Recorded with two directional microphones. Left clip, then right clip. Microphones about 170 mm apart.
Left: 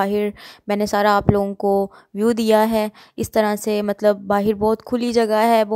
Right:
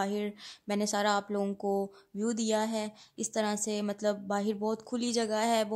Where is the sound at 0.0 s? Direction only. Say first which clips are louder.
Left 13 dB; 45° left (ahead or behind).